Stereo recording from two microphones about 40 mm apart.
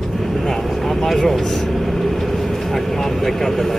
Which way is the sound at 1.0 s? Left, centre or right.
Centre.